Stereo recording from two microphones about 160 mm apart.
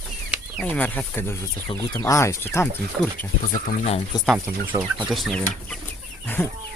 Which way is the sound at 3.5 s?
40° left (ahead or behind).